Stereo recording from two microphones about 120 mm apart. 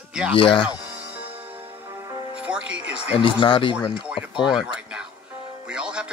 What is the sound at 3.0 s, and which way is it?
Speech, 45° left (ahead or behind).